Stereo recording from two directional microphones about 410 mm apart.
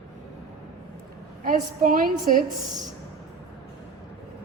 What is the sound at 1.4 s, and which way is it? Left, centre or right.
Speech, centre.